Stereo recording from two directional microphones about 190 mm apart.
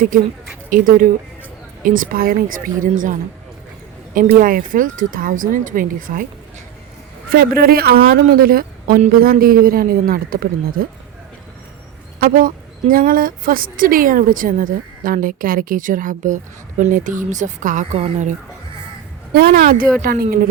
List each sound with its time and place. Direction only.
0.7 s a woman's voice: 45° right (ahead or behind)
4.4 s a woman's voice: 50° right (ahead or behind)
7.3 s a woman's voice: 50° right (ahead or behind)
12.2 s a woman's voice: 45° right (ahead or behind)
19.3 s a woman's voice: 50° right (ahead or behind)